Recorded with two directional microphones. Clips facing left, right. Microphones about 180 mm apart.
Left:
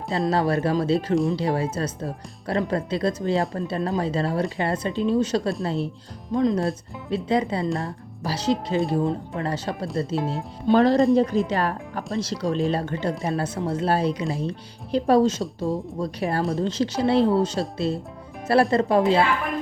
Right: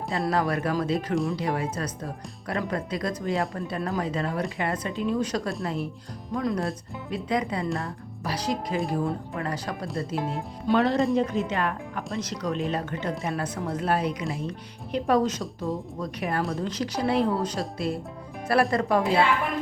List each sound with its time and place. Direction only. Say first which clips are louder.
0.1 s speech: left 4 dB; 25° left (ahead or behind)
1.1 s speech: left 5 dB; centre (ahead or behind)
1.4 s speech: left 4 dB; 30° left (ahead or behind)